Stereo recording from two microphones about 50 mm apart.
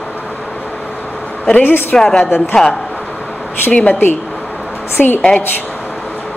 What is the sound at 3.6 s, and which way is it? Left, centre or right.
Speech, left.